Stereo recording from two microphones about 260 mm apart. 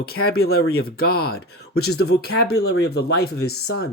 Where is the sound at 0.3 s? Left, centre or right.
Left.